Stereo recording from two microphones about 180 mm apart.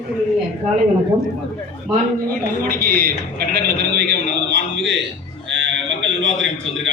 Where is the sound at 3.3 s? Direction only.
60° right (ahead or behind); by 6.7 s 90° right.